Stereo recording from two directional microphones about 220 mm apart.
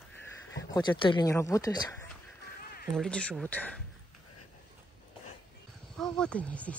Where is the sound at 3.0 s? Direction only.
5° left (ahead or behind).